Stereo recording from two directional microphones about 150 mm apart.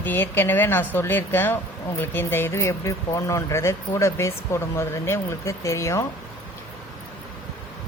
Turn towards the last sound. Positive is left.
turn(degrees=20)  # may be behind; listen again after turning